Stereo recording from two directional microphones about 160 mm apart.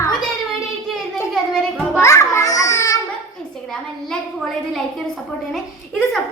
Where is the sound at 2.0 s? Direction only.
20° left (ahead or behind).